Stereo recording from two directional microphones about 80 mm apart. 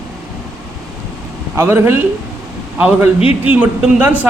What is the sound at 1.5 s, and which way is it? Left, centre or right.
Speech, right.